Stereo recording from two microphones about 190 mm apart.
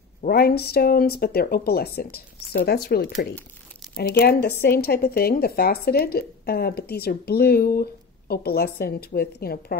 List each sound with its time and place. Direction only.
0.2 s speech: 55° left (ahead or behind)